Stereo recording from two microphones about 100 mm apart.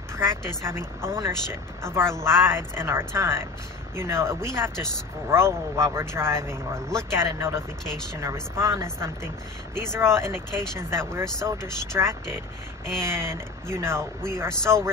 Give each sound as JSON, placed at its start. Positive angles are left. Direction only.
{"t": 0.7, "sound": "speech", "side_deg": -25}